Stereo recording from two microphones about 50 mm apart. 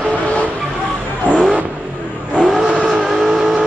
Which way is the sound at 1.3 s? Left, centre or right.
Left.